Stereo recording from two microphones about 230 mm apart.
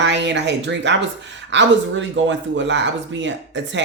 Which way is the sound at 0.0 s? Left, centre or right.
Right.